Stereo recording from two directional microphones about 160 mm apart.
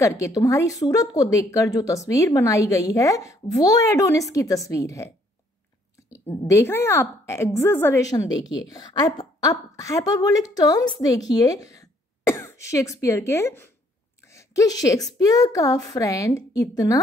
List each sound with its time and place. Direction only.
0.0 s speech: 20° left (ahead or behind)
6.1 s a woman's voice: 15° left (ahead or behind)